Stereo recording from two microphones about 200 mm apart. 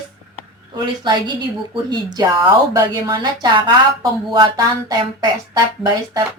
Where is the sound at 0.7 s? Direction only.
25° right (ahead or behind).